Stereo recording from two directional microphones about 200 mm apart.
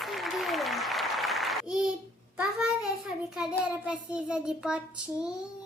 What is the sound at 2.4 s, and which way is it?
Child singing, 5° right (ahead or behind).